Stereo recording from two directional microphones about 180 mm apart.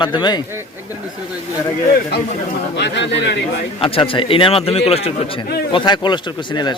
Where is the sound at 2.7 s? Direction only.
75° left (ahead or behind).